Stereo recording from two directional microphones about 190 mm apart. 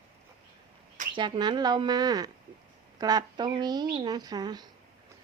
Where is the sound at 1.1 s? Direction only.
25° right (ahead or behind).